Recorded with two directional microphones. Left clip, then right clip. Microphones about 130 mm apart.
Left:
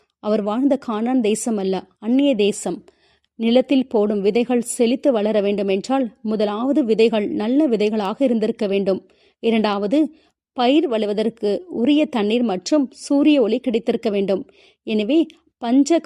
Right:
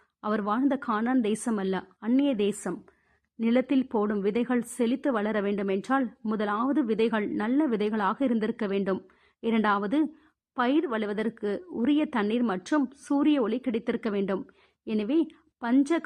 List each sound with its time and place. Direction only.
0.2 s a woman's voice: 40° left (ahead or behind)
12.7 s a woman's voice: 30° left (ahead or behind)